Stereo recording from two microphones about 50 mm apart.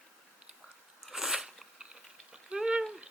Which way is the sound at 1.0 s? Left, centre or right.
Centre.